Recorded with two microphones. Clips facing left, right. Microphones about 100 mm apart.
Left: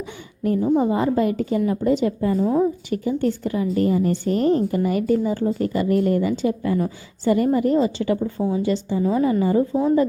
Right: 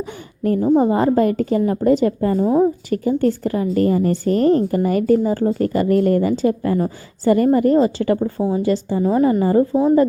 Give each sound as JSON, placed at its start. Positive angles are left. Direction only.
{"t": 0.0, "sound": "a sound", "side_deg": -50}
{"t": 0.8, "sound": "a woman's voice", "side_deg": -45}
{"t": 2.4, "sound": "a woman's voice", "side_deg": -25}
{"t": 2.9, "sound": "a woman's voice", "side_deg": -45}